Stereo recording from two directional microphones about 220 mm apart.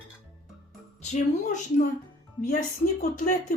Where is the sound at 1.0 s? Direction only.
30° left (ahead or behind).